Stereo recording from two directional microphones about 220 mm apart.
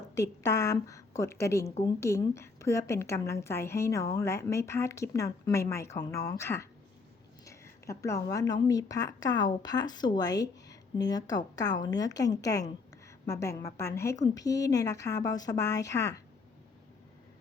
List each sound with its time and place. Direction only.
0.1 s a woman's voice: 15° left (ahead or behind)
7.4 s a sound: 15° left (ahead or behind)
8.6 s a woman's voice: 15° left (ahead or behind)